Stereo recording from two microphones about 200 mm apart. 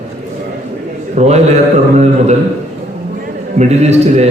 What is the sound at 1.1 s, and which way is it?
Speech, 35° right (ahead or behind).